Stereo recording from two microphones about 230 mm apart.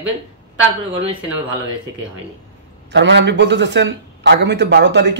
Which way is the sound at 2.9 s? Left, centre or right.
Right.